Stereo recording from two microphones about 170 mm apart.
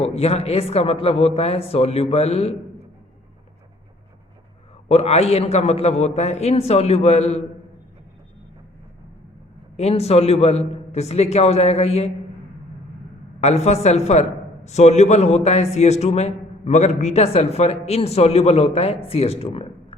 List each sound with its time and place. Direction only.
0.0 s a man's voice: 35° left (ahead or behind)
4.9 s a man's voice: 40° left (ahead or behind)
9.7 s a man's voice: 35° left (ahead or behind)
13.4 s a man's voice: 40° left (ahead or behind)